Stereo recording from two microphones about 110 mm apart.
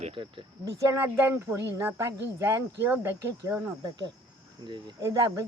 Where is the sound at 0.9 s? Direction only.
20° right (ahead or behind).